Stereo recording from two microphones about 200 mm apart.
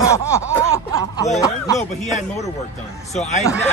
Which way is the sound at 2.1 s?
35° left (ahead or behind).